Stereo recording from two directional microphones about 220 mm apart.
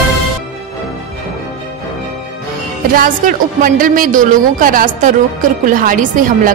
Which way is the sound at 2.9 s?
40° right (ahead or behind).